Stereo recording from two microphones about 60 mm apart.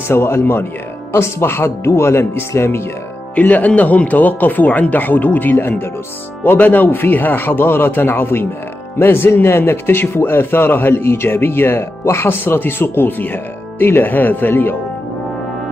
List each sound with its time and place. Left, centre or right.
0.1 s speech: left
3.3 s speech: left